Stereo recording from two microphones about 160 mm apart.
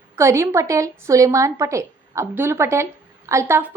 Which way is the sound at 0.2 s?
15° right (ahead or behind).